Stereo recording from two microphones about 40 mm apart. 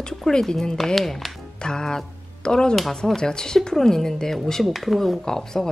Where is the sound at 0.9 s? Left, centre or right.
Centre.